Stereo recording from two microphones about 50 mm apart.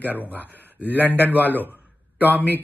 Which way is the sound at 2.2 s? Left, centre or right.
Right.